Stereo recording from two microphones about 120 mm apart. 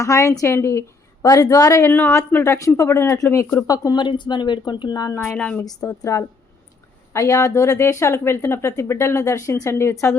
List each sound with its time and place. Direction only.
0.0 s a woman's voice: 25° left (ahead or behind)
1.9 s a woman's voice: 20° left (ahead or behind)
3.7 s speech: 35° left (ahead or behind)
5.1 s a woman's voice: 20° left (ahead or behind)
5.4 s a woman's voice: 10° left (ahead or behind)
5.6 s a woman's voice: 30° left (ahead or behind)